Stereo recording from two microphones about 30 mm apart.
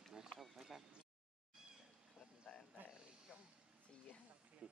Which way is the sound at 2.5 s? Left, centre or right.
Centre.